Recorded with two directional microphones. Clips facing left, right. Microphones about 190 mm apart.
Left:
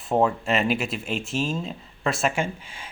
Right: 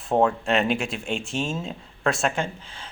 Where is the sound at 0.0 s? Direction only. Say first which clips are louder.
Right 1 dB; centre (ahead or behind).